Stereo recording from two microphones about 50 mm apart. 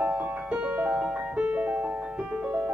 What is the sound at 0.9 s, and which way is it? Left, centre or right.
Music, right.